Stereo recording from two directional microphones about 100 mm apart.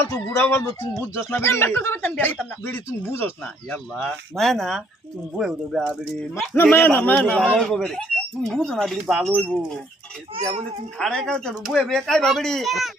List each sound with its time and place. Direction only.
0.3 s speech: 20° left (ahead or behind)
4.4 s speech: centre (ahead or behind)
6.5 s a man's voice: 15° left (ahead or behind)
10.9 s a man's voice: 5° left (ahead or behind)